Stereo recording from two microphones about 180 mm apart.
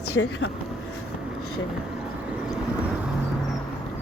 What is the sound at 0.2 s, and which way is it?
Speech, 90° left.